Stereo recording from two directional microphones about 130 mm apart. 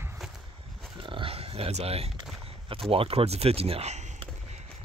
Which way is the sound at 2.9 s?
45° right (ahead or behind).